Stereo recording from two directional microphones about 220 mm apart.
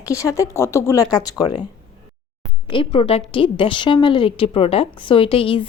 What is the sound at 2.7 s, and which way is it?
A woman's voice, 25° left (ahead or behind).